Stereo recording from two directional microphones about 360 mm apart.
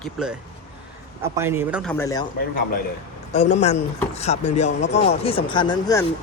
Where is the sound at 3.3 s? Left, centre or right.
Centre.